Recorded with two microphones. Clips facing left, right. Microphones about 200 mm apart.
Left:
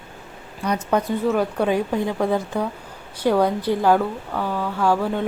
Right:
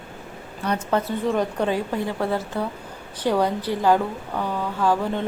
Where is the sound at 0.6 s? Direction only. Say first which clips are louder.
Left 2 dB; 10° left (ahead or behind).